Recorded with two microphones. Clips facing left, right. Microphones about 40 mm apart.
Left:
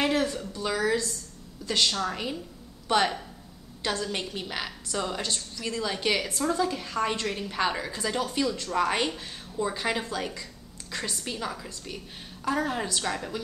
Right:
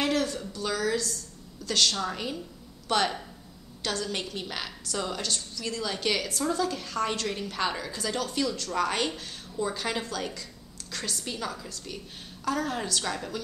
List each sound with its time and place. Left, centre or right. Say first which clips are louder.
0.0 s a woman's voice: left 1 dB; centre